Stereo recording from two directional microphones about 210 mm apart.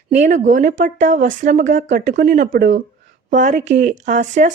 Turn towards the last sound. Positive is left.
turn(degrees=-35)  # may be behind; listen again after turning